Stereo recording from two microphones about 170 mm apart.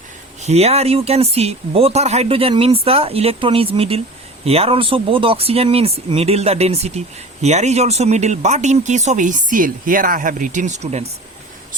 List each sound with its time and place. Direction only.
0.4 s speech: 40° right (ahead or behind)